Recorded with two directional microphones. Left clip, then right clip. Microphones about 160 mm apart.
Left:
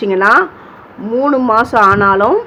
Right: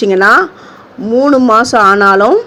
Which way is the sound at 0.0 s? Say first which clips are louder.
Right 3 dB; 35° right (ahead or behind).